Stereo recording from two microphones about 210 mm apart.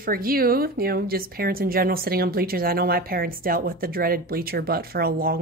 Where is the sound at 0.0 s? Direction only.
45° right (ahead or behind).